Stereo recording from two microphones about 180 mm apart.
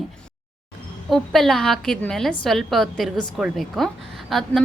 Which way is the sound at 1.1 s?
Centre (ahead or behind).